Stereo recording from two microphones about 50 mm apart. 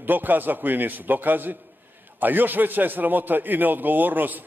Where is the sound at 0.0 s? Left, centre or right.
Right.